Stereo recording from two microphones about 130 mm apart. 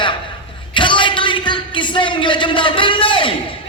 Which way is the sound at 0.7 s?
40° left (ahead or behind).